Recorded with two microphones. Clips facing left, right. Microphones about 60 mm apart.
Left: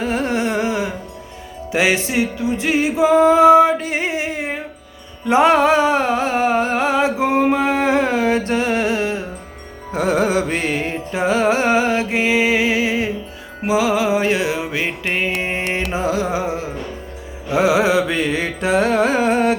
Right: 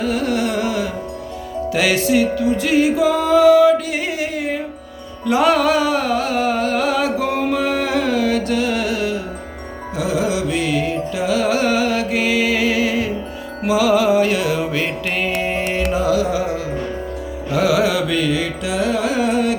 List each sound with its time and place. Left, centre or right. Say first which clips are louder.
0.0 s carnatic music: even; left
1.7 s music: right 1 dB; left
9.9 s music: left 3 dB; left
15.9 s carnatic music: right 4 dB; left